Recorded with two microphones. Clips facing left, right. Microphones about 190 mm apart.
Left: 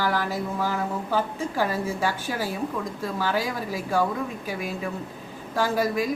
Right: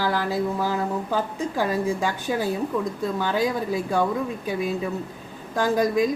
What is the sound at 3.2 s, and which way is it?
Speech, 20° right (ahead or behind).